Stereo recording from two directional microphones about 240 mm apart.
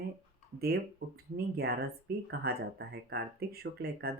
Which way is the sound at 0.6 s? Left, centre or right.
Right.